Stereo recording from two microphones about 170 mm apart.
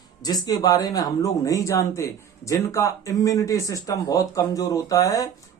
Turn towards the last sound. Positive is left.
turn(degrees=20)  # may be behind; listen again after turning